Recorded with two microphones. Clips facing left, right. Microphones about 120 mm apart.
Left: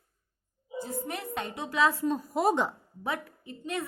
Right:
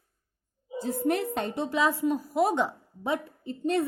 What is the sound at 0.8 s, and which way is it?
Speech, 60° right (ahead or behind).